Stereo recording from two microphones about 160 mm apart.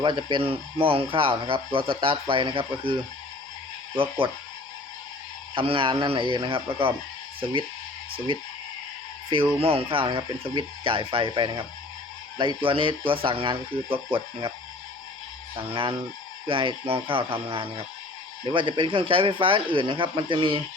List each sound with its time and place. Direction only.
0.0 s speech: 30° right (ahead or behind)
5.5 s speech: 35° right (ahead or behind)
9.3 s speech: 35° right (ahead or behind)
12.6 s speech: 35° right (ahead or behind)
15.7 s speech: 35° right (ahead or behind)